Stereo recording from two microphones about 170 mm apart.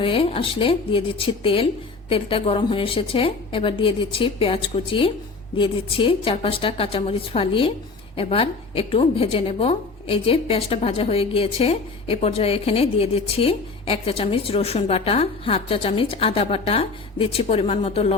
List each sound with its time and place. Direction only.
0.0 s a woman's voice: 30° left (ahead or behind)